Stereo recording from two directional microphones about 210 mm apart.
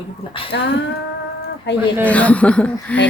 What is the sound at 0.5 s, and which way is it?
Speech, 60° left (ahead or behind).